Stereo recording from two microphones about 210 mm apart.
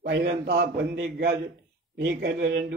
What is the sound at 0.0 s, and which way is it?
A man's voice, 55° right (ahead or behind).